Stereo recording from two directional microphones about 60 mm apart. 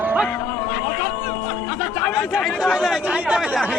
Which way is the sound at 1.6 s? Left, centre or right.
Left.